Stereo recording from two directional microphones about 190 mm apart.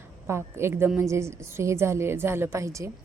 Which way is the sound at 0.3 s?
15° right (ahead or behind).